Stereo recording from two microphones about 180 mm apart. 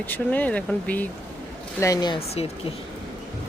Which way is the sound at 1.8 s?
20° left (ahead or behind).